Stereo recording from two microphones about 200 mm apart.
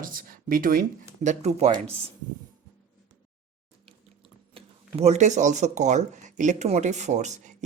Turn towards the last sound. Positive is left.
turn(degrees=-35)  # may be behind; listen again after turning